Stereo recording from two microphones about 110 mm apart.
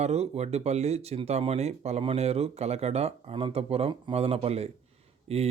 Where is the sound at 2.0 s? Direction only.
65° right (ahead or behind).